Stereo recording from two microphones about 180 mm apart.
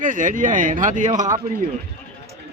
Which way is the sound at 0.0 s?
45° right (ahead or behind).